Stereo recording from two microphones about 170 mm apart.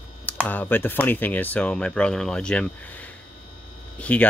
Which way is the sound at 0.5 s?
10° left (ahead or behind).